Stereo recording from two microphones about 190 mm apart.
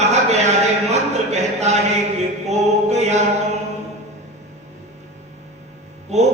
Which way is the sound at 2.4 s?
35° right (ahead or behind).